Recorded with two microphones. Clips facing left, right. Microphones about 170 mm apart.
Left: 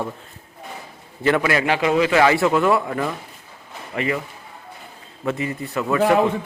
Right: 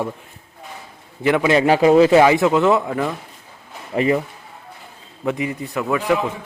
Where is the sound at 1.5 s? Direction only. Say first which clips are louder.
Right 6 dB; 35° right (ahead or behind).